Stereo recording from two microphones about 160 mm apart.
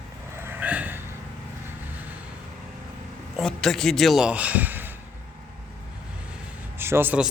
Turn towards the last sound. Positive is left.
turn(degrees=-10)  # may be behind; listen again after turning